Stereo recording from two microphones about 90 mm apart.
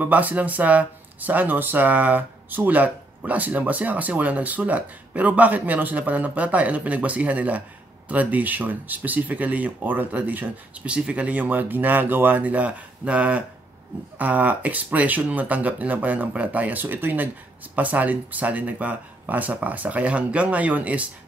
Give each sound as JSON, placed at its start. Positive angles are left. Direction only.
{"t": 0.0, "sound": "speech", "side_deg": -20}